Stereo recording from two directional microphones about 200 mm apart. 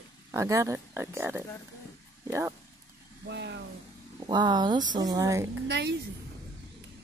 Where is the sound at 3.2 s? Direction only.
60° right (ahead or behind).